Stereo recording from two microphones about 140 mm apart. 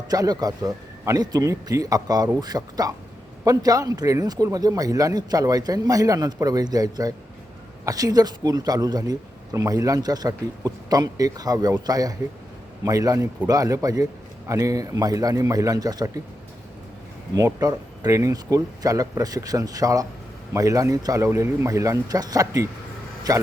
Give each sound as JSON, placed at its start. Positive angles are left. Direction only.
{"t": 0.1, "sound": "speech", "side_deg": -25}
{"t": 17.3, "sound": "speech", "side_deg": -25}